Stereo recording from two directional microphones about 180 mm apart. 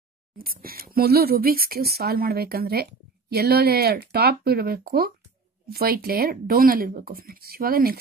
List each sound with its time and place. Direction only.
0.4 s speech: 55° right (ahead or behind)